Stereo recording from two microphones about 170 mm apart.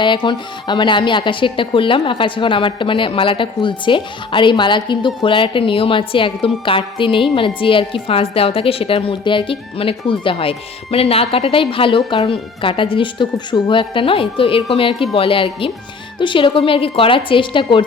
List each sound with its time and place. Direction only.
0.0 s speech: 30° left (ahead or behind)